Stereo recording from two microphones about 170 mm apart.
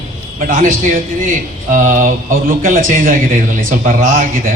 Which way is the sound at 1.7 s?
50° right (ahead or behind).